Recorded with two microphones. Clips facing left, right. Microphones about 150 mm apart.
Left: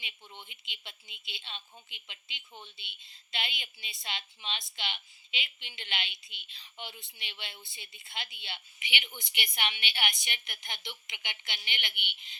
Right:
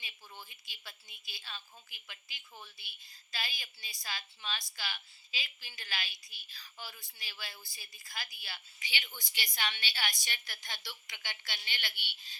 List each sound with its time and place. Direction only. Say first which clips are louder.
0.0 s speech: left 2 dB; 25° left (ahead or behind)